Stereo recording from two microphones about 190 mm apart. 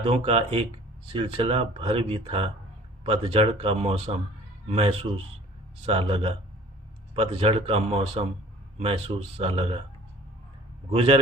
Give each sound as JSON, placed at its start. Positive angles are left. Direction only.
{"t": 0.0, "sound": "speech", "side_deg": -30}
{"t": 10.9, "sound": "speech", "side_deg": -35}